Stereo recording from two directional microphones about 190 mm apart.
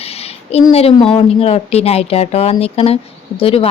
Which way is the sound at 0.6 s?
30° left (ahead or behind).